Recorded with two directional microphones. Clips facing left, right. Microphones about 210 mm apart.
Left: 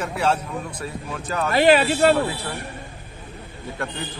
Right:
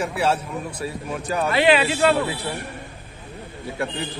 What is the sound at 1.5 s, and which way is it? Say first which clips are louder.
Speech: left 2 dB; 40° left (ahead or behind).